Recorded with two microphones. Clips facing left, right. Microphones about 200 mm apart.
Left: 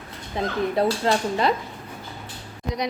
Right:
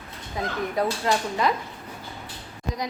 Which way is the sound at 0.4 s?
25° left (ahead or behind).